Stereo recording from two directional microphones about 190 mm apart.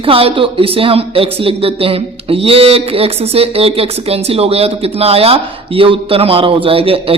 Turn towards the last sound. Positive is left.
turn(degrees=-30)  # may be behind; listen again after turning